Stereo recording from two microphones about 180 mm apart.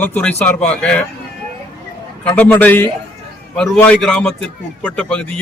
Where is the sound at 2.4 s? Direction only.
10° left (ahead or behind).